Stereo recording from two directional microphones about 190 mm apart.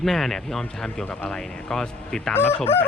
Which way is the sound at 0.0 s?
Centre (ahead or behind).